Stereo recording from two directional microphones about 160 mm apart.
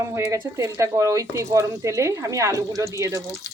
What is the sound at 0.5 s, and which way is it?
Speech, 20° right (ahead or behind).